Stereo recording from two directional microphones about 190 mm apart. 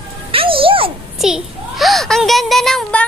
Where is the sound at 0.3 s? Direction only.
30° right (ahead or behind).